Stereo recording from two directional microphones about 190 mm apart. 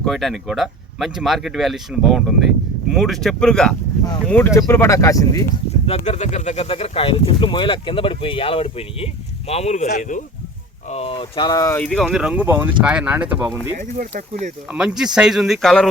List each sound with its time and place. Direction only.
0.0 s speech: centre (ahead or behind); by 5.5 s 15° left (ahead or behind)
5.8 s speech: 35° left (ahead or behind); by 11.9 s 15° left (ahead or behind)
11.9 s speech: centre (ahead or behind)
13.7 s speech: 45° right (ahead or behind)
14.7 s speech: 5° right (ahead or behind)